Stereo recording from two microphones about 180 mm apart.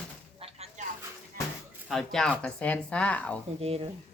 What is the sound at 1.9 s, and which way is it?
A woman's voice, centre (ahead or behind).